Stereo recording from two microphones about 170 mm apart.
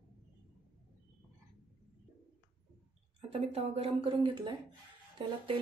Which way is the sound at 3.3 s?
35° right (ahead or behind).